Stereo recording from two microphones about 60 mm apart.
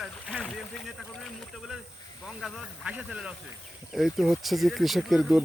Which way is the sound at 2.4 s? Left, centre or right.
Centre.